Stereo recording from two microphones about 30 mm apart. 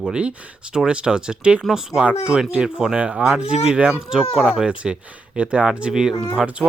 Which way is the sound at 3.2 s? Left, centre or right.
Right.